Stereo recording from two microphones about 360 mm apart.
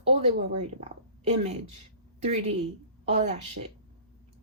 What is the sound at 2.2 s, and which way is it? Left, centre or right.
Speech, centre.